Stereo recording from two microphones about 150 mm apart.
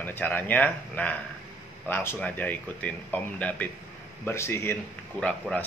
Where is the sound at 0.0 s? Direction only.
10° left (ahead or behind).